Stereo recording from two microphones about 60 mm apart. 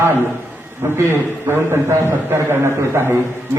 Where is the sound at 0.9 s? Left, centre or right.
Right.